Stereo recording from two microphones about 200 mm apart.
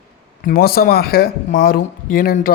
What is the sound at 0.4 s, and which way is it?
Speech, 50° left (ahead or behind).